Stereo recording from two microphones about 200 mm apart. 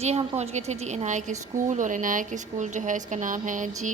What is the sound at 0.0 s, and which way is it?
A woman's voice, 35° right (ahead or behind).